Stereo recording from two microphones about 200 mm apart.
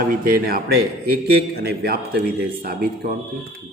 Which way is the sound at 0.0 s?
45° right (ahead or behind).